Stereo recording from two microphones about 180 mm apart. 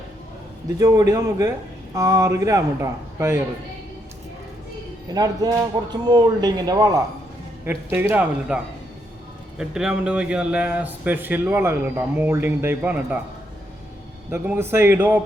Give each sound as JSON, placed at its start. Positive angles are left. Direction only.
{"t": 0.8, "sound": "a man's voice", "side_deg": -15}
{"t": 5.1, "sound": "a man's voice", "side_deg": -20}
{"t": 14.3, "sound": "a man's voice", "side_deg": -10}